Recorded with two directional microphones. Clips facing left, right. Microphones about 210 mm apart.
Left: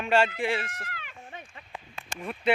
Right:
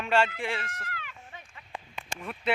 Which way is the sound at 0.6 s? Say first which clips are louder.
Left 1 dB; 15° left (ahead or behind).